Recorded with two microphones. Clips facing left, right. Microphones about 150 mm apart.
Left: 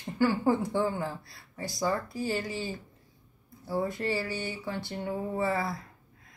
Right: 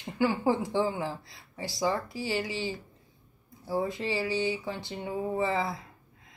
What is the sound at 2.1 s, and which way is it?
Speech, 90° right.